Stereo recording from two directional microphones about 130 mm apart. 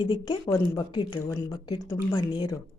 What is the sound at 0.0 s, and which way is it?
Speech, 35° left (ahead or behind).